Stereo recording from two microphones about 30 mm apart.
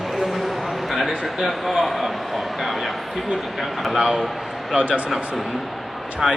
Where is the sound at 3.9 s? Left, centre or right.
Right.